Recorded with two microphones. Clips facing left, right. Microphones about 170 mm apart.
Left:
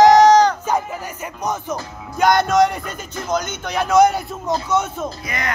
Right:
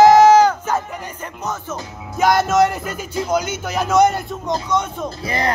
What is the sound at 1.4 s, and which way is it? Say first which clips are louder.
Speech: left 3 dB; 15° left (ahead or behind).